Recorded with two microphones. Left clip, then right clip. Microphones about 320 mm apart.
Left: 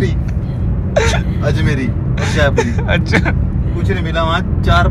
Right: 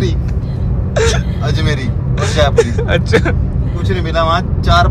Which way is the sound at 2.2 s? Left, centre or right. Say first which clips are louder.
Right 3 dB; centre.